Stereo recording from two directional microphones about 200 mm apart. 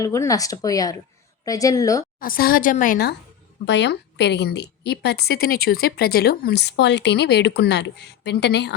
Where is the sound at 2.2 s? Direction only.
45° left (ahead or behind).